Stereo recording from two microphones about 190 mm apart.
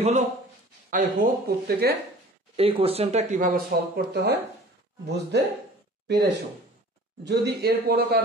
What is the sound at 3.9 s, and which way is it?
Speech, 60° right (ahead or behind).